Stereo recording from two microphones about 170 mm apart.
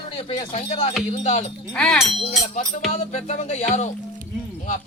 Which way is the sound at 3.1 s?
45° left (ahead or behind).